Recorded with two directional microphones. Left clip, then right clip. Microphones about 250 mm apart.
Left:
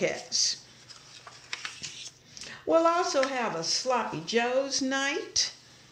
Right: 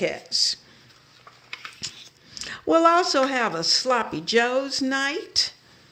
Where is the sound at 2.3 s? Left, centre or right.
Right.